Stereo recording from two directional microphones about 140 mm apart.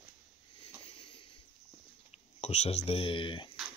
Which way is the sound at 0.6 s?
45° left (ahead or behind).